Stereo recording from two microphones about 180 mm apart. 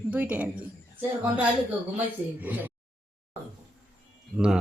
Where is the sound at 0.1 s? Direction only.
5° right (ahead or behind).